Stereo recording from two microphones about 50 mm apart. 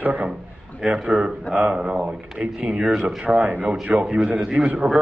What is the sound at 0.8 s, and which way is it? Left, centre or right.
A man's voice, centre.